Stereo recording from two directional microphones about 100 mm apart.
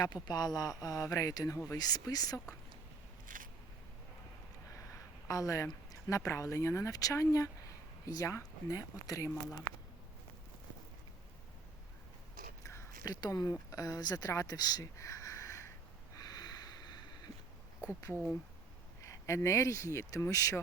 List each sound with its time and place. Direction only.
0.0 s speech: 45° left (ahead or behind)
5.3 s speech: 35° left (ahead or behind)
12.6 s a sound: 25° left (ahead or behind)
13.1 s speech: 45° left (ahead or behind)
16.1 s snort: 40° left (ahead or behind)
19.0 s speech: 30° left (ahead or behind)